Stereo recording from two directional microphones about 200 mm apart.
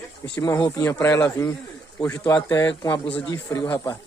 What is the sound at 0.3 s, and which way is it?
A man's voice, 15° left (ahead or behind).